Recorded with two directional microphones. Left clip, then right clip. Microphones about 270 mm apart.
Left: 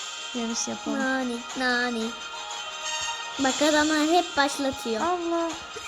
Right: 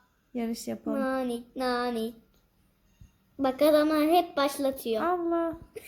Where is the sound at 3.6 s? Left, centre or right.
Left.